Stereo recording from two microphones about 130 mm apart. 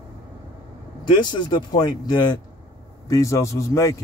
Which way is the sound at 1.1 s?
35° left (ahead or behind).